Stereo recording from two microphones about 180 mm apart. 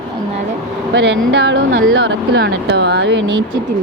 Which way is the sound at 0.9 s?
75° right (ahead or behind).